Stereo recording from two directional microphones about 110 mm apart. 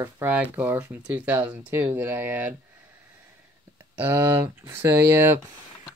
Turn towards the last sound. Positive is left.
turn(degrees=-20)  # may be behind; listen again after turning